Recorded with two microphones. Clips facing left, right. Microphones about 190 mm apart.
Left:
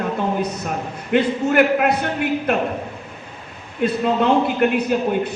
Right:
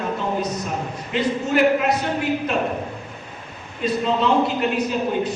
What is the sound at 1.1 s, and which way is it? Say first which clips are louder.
A man's voice: left 4 dB; 55° left (ahead or behind).